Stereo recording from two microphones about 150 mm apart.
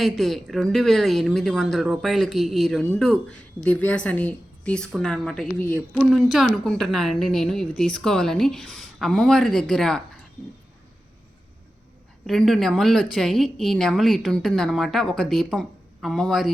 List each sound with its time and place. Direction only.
0.0 s a woman's voice: centre (ahead or behind)
6.0 s a woman's voice: centre (ahead or behind)
12.2 s a woman's voice: centre (ahead or behind)